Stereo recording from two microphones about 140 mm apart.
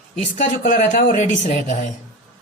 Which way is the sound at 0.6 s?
65° left (ahead or behind).